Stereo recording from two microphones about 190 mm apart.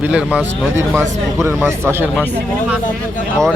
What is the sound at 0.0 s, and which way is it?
Speech, 5° right (ahead or behind).